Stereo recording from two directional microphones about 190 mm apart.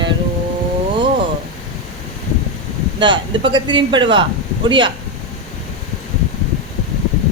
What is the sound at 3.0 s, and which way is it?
Speech, 25° right (ahead or behind).